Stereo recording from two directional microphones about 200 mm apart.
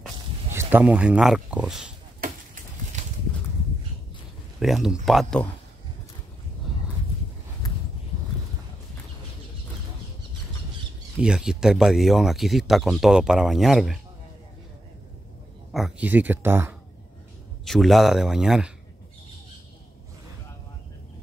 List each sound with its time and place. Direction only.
0.5 s speech: 10° right (ahead or behind)
2.1 s a sound: 45° right (ahead or behind)
4.6 s speech: centre (ahead or behind)
11.1 s speech: 5° right (ahead or behind)
15.7 s speech: 5° right (ahead or behind)
17.6 s speech: centre (ahead or behind)